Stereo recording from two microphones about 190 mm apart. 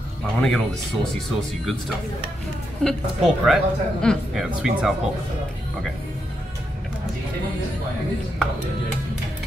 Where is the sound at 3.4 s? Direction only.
Centre (ahead or behind).